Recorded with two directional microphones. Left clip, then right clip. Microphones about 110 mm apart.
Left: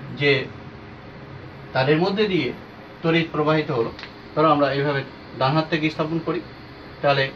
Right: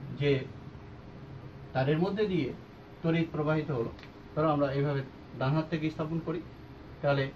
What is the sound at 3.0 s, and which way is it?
A man's voice, 15° left (ahead or behind).